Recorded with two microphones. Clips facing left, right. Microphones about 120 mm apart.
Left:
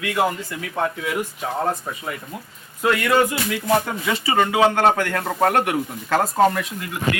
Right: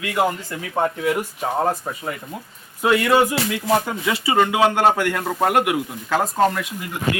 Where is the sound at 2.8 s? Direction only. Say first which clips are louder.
Right 2 dB; 25° right (ahead or behind).